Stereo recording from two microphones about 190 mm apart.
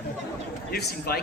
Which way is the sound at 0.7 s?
55° left (ahead or behind).